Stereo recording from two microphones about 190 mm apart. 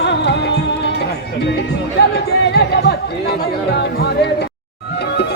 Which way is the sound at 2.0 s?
60° left (ahead or behind).